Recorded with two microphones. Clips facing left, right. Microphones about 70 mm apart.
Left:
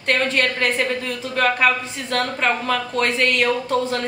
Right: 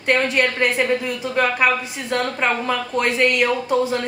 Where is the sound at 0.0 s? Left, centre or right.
Centre.